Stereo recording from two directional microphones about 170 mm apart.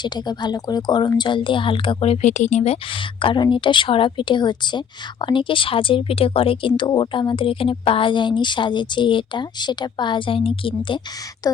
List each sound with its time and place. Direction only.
0.0 s speech: 25° left (ahead or behind)